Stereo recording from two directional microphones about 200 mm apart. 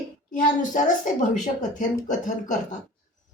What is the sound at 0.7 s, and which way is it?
A woman's voice, 40° left (ahead or behind).